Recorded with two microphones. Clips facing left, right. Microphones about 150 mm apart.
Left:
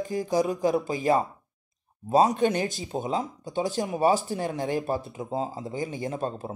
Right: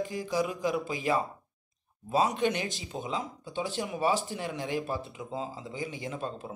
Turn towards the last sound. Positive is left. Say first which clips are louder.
# left 6 dB
turn(degrees=40)  # may be behind; listen again after turning